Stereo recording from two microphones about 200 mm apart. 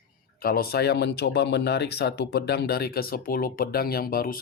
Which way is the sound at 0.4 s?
50° left (ahead or behind).